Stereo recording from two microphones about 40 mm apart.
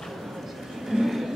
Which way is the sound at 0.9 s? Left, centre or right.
Centre.